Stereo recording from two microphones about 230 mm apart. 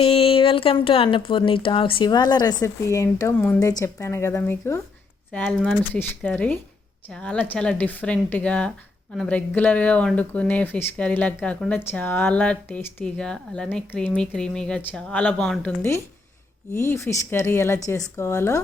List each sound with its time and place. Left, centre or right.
0.0 s speech: left